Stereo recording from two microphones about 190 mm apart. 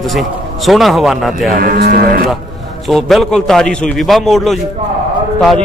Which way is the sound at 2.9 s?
Centre (ahead or behind).